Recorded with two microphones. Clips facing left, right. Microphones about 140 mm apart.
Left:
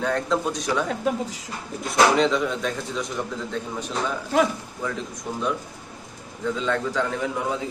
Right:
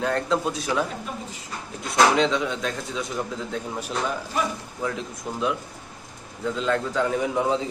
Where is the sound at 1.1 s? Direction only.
90° left.